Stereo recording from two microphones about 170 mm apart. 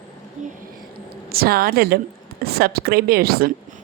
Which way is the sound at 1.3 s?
65° right (ahead or behind).